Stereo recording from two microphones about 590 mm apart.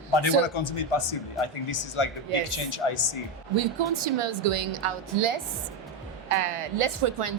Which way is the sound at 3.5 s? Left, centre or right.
Right.